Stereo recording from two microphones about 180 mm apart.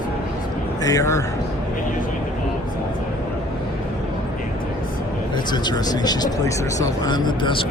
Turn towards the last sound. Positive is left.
turn(degrees=25)  # may be behind; listen again after turning